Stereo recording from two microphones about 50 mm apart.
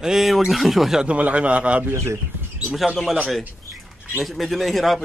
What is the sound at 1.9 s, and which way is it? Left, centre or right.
Speech, right.